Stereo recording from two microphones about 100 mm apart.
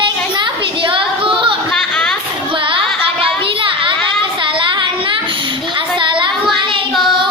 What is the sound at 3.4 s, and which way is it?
Child singing, 60° right (ahead or behind).